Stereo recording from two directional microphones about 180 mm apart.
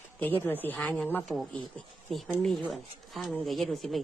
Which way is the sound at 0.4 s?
10° left (ahead or behind).